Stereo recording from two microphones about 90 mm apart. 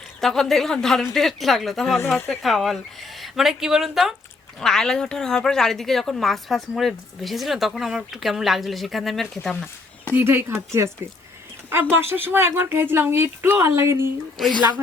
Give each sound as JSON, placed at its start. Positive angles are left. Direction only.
{"t": 0.2, "sound": "a woman's voice", "side_deg": 5}
{"t": 4.6, "sound": "a woman's voice", "side_deg": 5}
{"t": 10.1, "sound": "speech", "side_deg": -25}
{"t": 14.3, "sound": "a woman's voice", "side_deg": 0}